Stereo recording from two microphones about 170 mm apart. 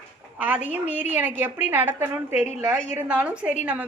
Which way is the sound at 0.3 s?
10° right (ahead or behind).